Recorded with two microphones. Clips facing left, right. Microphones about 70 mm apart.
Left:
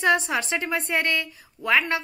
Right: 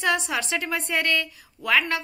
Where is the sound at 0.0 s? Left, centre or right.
Left.